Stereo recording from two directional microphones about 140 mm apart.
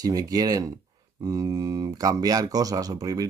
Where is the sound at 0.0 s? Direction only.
25° right (ahead or behind).